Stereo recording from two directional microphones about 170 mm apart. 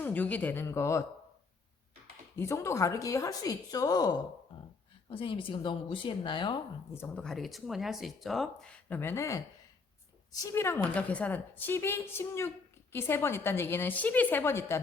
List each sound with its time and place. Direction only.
0.0 s a woman's voice: 10° left (ahead or behind)
2.3 s a woman's voice: 15° left (ahead or behind)
5.0 s speech: 30° left (ahead or behind)
6.9 s speech: 10° left (ahead or behind)
9.0 s a woman's voice: 15° left (ahead or behind)
10.4 s a woman's voice: 15° left (ahead or behind)